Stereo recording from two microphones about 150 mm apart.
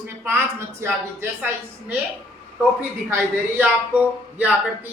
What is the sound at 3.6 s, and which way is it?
Speech, 10° right (ahead or behind).